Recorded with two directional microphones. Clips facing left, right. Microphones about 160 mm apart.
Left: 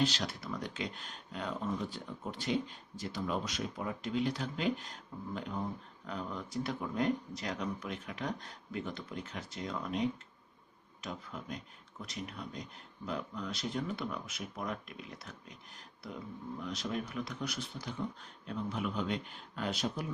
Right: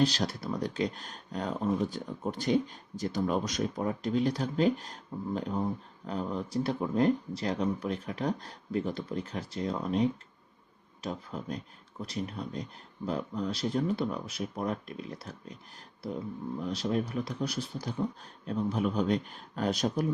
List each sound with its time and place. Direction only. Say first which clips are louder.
0.0 s speech: right 5 dB; 40° right (ahead or behind)
16.6 s speech: right 7 dB; 35° right (ahead or behind)